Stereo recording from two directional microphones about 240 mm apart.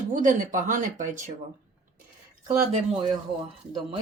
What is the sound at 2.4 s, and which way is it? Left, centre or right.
Speech, right.